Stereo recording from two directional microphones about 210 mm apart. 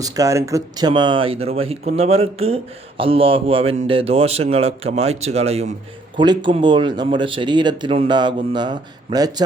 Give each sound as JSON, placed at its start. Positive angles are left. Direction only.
{"t": 0.0, "sound": "speech", "side_deg": -15}